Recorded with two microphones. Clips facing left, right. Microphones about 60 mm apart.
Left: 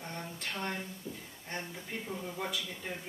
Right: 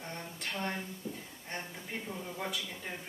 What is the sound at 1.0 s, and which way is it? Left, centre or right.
Speech, right.